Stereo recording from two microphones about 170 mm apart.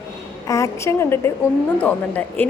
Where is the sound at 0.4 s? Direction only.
20° left (ahead or behind).